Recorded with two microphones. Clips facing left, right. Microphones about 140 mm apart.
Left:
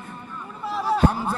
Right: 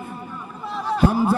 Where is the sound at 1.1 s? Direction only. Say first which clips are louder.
Right 7 dB; 5° right (ahead or behind).